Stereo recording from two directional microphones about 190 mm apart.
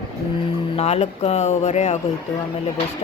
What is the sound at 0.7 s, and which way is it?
A woman's voice, 35° left (ahead or behind).